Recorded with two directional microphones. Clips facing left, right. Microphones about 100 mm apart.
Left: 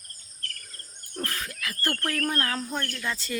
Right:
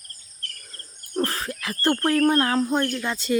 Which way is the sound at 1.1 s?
35° right (ahead or behind).